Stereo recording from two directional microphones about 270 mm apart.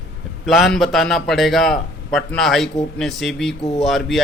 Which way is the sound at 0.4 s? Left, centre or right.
Centre.